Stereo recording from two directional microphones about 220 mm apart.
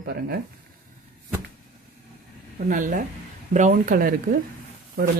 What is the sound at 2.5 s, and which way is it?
Speech, 35° right (ahead or behind).